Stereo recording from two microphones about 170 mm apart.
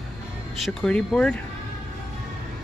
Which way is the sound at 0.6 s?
5° left (ahead or behind).